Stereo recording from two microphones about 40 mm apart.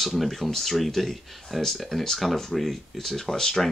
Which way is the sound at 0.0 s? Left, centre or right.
Centre.